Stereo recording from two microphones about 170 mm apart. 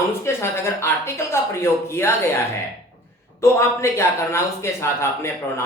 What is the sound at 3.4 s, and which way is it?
Speech, 15° left (ahead or behind).